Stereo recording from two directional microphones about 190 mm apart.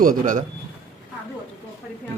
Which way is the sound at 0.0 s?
45° right (ahead or behind).